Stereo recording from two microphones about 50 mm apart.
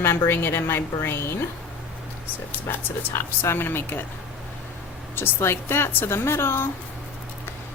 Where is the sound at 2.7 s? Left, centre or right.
Left.